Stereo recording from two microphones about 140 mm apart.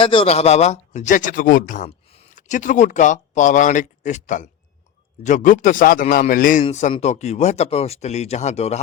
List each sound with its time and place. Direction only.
0.0 s speech: 40° left (ahead or behind)